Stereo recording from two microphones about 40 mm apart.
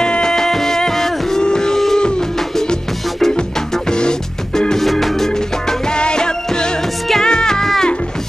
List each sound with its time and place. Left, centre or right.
0.0 s music: centre
1.4 s a sound: centre
4.6 s music: centre
5.9 s music: left